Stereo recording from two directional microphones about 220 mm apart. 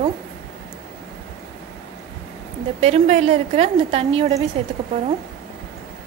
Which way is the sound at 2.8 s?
30° right (ahead or behind).